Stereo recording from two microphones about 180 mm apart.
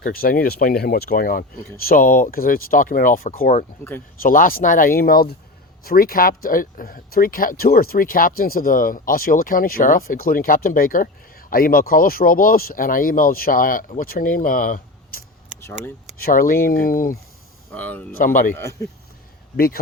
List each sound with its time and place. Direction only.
0.0 s speech: 55° left (ahead or behind)
17.7 s speech: 10° left (ahead or behind)
19.5 s speech: 55° left (ahead or behind)